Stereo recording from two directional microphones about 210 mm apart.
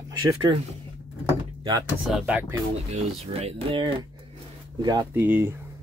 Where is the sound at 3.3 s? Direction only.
25° right (ahead or behind).